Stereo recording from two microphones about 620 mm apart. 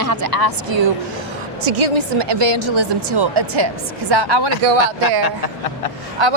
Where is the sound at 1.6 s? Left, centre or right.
Right.